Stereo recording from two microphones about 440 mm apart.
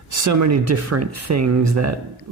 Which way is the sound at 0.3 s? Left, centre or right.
Right.